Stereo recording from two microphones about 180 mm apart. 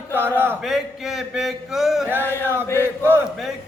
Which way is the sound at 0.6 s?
Centre (ahead or behind).